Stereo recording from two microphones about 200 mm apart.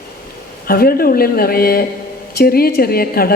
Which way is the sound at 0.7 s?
50° left (ahead or behind).